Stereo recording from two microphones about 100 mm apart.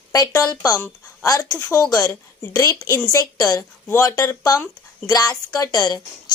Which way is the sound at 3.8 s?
25° left (ahead or behind).